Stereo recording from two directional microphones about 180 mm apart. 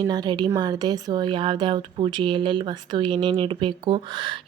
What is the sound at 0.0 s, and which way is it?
Speech, 25° right (ahead or behind).